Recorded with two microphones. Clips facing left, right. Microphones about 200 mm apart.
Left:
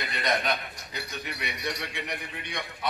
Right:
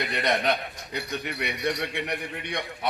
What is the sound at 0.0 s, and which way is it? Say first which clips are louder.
Chuckle: right 3 dB; 15° right (ahead or behind).